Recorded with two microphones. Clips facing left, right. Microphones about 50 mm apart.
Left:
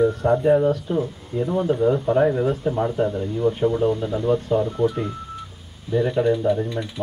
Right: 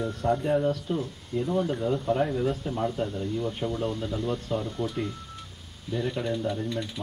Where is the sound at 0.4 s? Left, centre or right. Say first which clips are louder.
Left 8 dB; left.